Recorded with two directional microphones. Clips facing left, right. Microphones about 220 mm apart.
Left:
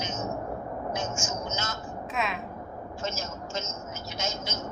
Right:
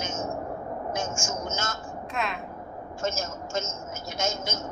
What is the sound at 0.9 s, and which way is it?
Speech, 45° right (ahead or behind).